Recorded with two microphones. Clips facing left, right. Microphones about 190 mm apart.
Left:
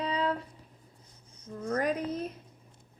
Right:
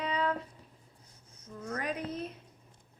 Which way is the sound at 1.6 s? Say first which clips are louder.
Left 6 dB; 40° left (ahead or behind).